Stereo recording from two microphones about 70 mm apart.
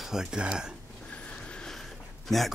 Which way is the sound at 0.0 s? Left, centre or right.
Centre.